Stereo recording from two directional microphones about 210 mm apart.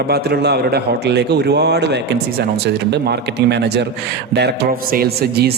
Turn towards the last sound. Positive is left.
turn(degrees=-45)  # may be behind; listen again after turning